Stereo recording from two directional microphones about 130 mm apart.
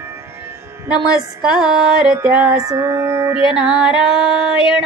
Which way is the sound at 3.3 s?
5° right (ahead or behind).